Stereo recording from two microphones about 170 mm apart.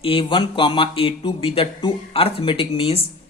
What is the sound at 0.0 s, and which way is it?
Speech, 30° left (ahead or behind).